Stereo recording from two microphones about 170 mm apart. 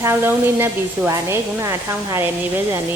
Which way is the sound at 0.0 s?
15° right (ahead or behind).